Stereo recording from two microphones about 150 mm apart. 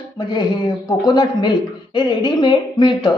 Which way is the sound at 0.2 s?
30° left (ahead or behind).